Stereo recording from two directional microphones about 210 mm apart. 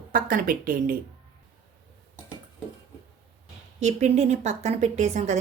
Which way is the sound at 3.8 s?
35° right (ahead or behind).